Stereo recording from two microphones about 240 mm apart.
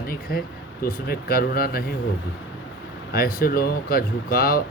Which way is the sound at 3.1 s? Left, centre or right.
Left.